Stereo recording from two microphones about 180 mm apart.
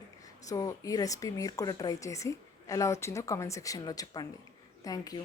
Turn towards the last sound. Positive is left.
turn(degrees=20)  # may be behind; listen again after turning